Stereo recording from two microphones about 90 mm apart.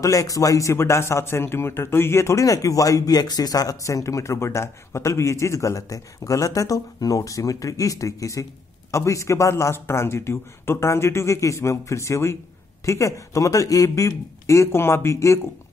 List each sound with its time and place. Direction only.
0.0 s a man's voice: 40° left (ahead or behind)